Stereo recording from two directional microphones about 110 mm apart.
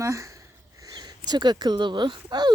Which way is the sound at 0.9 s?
40° right (ahead or behind).